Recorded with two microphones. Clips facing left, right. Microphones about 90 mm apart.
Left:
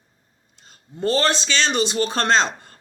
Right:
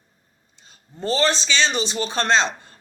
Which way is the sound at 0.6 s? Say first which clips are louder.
Left 5 dB; 55° left (ahead or behind).